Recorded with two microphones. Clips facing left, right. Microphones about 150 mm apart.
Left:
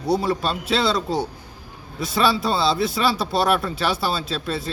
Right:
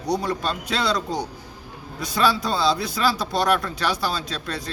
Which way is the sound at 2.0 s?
Centre (ahead or behind).